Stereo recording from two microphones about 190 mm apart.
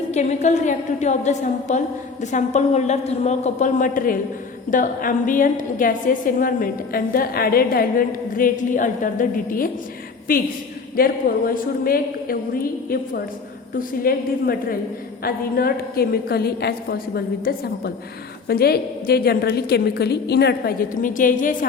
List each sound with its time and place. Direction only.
0.1 s a woman's voice: 35° left (ahead or behind)